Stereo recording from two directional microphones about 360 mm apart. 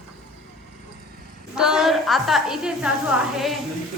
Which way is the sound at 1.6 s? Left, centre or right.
Centre.